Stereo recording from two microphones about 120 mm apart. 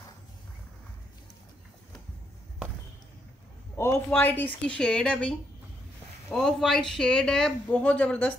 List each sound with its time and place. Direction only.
3.7 s speech: 20° left (ahead or behind)
6.3 s a man's voice: centre (ahead or behind)